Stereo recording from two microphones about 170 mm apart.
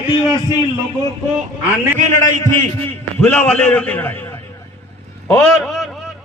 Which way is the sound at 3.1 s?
10° left (ahead or behind).